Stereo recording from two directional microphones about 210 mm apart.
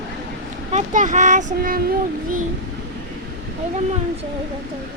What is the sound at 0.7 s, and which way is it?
Speech, 40° right (ahead or behind).